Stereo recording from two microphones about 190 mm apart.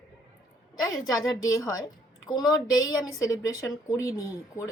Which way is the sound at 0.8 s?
20° left (ahead or behind).